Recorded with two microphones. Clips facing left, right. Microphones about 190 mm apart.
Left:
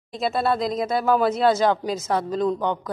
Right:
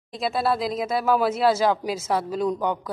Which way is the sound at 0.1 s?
Centre (ahead or behind).